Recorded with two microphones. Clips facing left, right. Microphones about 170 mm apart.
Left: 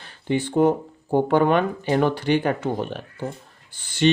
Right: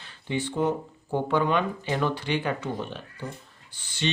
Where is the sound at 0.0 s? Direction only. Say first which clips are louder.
Left 6 dB; 45° left (ahead or behind).